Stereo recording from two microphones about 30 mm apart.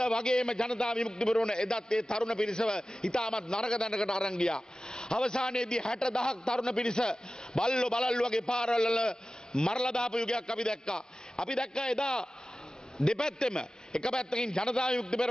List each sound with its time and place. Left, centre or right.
0.0 s a man's voice: left